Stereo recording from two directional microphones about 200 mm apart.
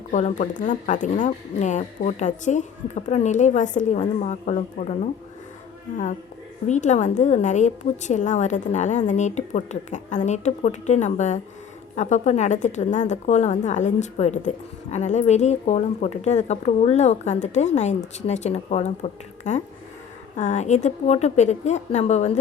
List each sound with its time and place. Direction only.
0.1 s a woman's voice: 40° left (ahead or behind)
6.7 s a woman's voice: 35° left (ahead or behind)